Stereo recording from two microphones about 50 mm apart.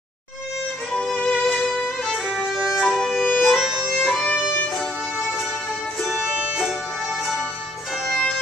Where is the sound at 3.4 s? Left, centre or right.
Centre.